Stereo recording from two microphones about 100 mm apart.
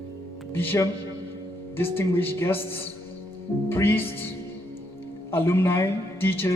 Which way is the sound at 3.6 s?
25° left (ahead or behind).